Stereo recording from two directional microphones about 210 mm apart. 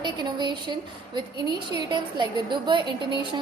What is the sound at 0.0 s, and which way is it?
A woman's voice, 20° right (ahead or behind).